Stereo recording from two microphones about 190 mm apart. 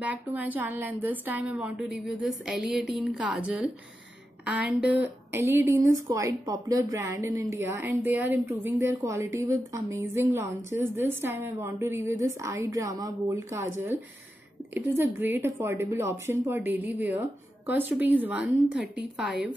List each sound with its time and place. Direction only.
0.0 s a woman's voice: 10° right (ahead or behind)